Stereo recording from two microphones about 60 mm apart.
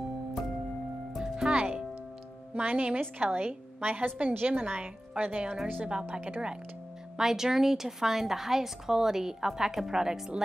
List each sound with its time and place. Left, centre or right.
1.1 s music: centre
2.5 s a woman's voice: right
7.2 s a woman's voice: centre